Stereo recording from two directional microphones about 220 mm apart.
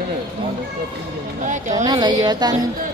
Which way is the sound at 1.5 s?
35° right (ahead or behind).